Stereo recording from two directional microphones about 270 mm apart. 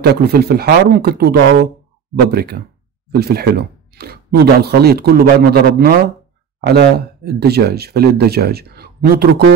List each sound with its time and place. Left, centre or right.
0.0 s speech: right